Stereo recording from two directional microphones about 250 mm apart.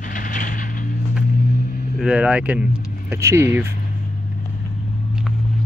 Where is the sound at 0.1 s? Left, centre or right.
Left.